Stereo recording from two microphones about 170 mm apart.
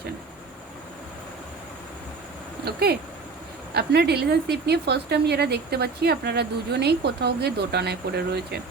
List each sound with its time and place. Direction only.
3.8 s speech: 70° right (ahead or behind)